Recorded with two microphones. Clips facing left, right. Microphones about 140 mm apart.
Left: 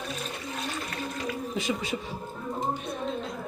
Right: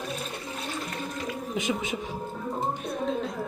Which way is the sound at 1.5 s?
20° right (ahead or behind).